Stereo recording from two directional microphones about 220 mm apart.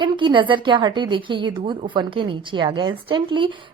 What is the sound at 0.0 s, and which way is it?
A woman's voice, 20° right (ahead or behind).